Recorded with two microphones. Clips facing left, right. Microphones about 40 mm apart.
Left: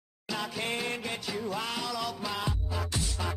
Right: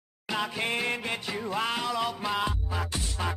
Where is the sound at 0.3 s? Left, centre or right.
Right.